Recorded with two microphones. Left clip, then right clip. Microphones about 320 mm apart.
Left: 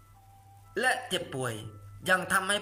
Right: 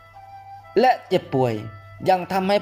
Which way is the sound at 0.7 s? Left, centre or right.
Centre.